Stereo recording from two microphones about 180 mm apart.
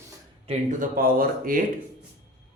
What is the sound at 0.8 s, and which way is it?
Speech, 50° right (ahead or behind).